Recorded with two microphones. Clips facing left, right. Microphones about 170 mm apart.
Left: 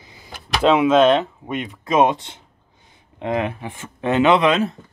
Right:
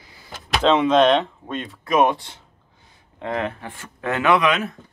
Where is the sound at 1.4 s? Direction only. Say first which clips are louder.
Left 3 dB; 15° left (ahead or behind).